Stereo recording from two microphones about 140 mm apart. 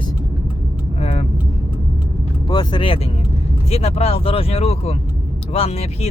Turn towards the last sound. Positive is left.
turn(degrees=50)  # may be behind; listen again after turning